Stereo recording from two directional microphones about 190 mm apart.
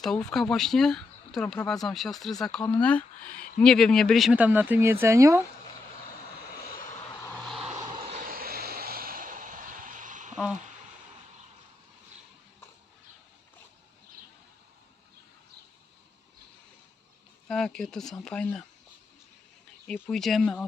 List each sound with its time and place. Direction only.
0.0 s speech: 5° left (ahead or behind); by 5.5 s 15° right (ahead or behind)
7.3 s vehicle: centre (ahead or behind)
7.9 s vehicle: 35° right (ahead or behind)
17.5 s speech: 5° left (ahead or behind)
19.9 s speech: 5° left (ahead or behind)